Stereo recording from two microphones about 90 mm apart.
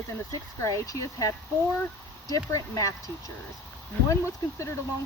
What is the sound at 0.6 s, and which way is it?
Speech, 35° left (ahead or behind).